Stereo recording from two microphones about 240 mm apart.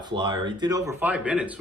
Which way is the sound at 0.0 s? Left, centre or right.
Centre.